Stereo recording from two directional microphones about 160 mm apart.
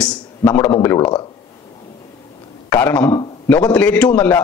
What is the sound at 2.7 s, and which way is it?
Speech, 10° left (ahead or behind).